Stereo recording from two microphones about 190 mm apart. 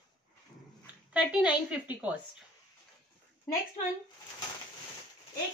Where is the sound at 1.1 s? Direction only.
5° right (ahead or behind).